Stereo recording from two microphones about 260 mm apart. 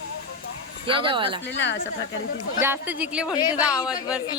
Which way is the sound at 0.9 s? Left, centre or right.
Centre.